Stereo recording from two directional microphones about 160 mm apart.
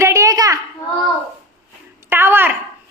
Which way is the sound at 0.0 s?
20° right (ahead or behind).